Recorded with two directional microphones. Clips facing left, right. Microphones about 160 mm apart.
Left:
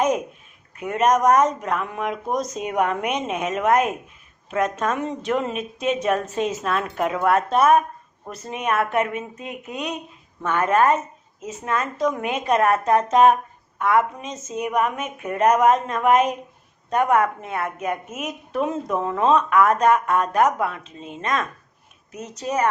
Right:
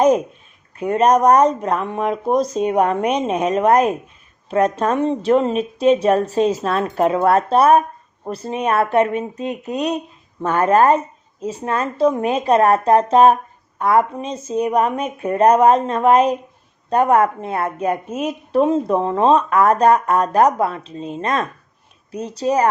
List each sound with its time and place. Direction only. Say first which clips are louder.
0.8 s a woman's voice: right 5 dB; 35° right (ahead or behind)